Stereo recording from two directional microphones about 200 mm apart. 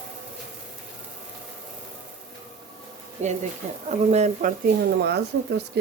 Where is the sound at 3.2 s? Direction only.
35° right (ahead or behind).